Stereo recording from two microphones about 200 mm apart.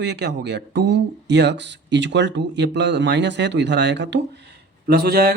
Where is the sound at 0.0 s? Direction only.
55° right (ahead or behind).